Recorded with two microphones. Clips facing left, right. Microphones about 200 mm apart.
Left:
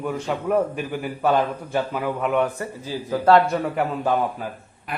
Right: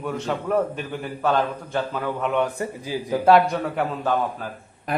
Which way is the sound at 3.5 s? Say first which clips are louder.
Left 2 dB; 5° left (ahead or behind).